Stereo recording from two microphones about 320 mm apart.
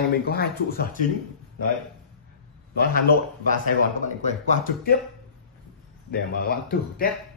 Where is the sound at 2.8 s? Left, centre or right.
Left.